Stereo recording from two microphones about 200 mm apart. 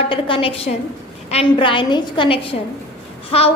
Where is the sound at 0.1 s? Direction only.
25° left (ahead or behind).